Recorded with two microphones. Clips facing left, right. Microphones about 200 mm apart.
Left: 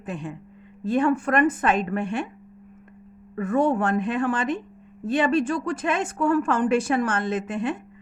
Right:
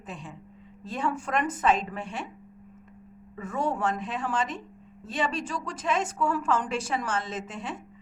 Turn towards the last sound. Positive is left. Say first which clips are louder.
# left 9 dB
turn(degrees=60)  # may be behind; listen again after turning